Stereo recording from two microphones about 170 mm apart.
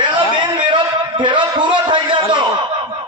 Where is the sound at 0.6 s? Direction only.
30° right (ahead or behind).